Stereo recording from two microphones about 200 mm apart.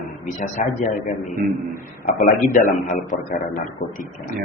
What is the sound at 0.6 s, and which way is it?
Speech, 40° left (ahead or behind).